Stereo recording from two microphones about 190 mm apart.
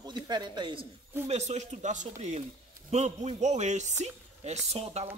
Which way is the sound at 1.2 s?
35° right (ahead or behind).